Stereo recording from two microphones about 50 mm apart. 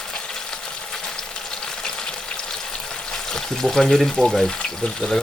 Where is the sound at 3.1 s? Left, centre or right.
Centre.